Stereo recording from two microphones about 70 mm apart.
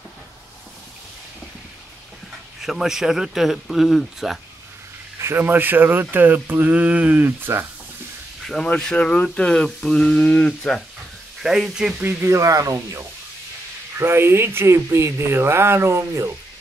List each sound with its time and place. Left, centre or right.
2.6 s speech: centre
5.2 s speech: right
8.7 s speech: centre
11.4 s speech: centre
12.0 s speech: right
12.3 s speech: right
13.9 s speech: right